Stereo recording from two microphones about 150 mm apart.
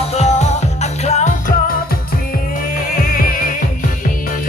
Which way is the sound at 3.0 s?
70° left (ahead or behind).